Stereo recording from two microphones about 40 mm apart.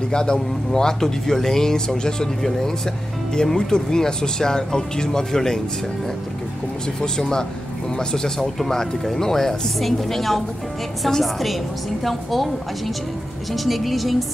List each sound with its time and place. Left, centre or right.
0.1 s speech: centre
3.3 s speech: centre
7.0 s a woman's voice: centre